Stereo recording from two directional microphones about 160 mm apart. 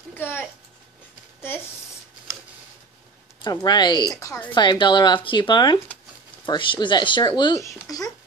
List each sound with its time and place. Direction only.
0.1 s speech: 10° left (ahead or behind)
3.4 s speech: 25° left (ahead or behind)
4.5 s speech: 30° left (ahead or behind)